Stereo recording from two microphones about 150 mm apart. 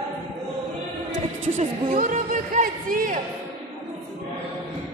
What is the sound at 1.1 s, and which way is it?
Speech, 55° right (ahead or behind).